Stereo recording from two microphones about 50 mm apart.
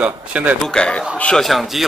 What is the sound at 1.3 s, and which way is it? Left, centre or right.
Speech, centre.